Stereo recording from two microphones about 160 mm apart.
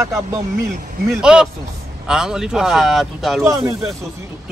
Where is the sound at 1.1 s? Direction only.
5° right (ahead or behind).